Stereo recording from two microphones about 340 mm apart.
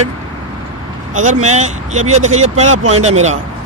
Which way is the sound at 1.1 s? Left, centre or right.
Right.